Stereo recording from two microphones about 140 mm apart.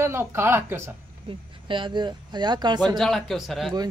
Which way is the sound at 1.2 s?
35° right (ahead or behind).